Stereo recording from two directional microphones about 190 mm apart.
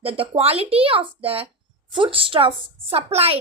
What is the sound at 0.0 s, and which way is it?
A woman's voice, 30° right (ahead or behind).